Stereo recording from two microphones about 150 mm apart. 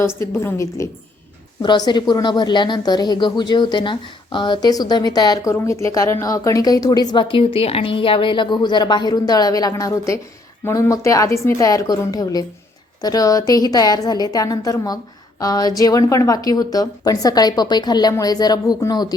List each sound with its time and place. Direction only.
0.2 s a woman's voice: 15° left (ahead or behind)